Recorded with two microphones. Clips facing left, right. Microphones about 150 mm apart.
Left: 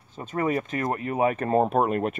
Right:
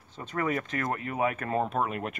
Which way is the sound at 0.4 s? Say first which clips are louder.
Left 4 dB; 25° left (ahead or behind).